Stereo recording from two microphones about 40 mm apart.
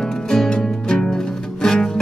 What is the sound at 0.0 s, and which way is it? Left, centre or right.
Music, centre.